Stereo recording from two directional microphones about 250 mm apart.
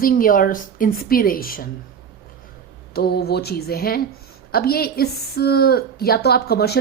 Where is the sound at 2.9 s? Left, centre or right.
Left.